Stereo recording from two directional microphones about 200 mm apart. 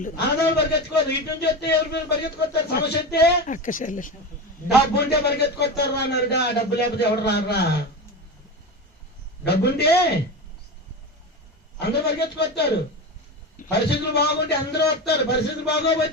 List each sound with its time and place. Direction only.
0.0 s a man's voice: 50° left (ahead or behind)
3.4 s speech: 40° left (ahead or behind)
4.9 s a man's voice: 55° left (ahead or behind)
9.4 s a man's voice: 55° left (ahead or behind)
11.8 s a man's voice: 55° left (ahead or behind)